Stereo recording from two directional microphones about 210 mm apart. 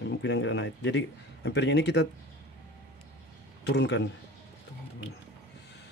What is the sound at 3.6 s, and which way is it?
Speech, 55° left (ahead or behind).